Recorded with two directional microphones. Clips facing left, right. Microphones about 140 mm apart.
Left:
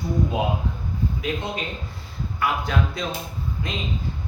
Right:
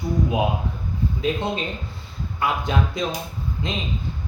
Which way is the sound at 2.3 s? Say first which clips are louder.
Right 1 dB; 20° right (ahead or behind).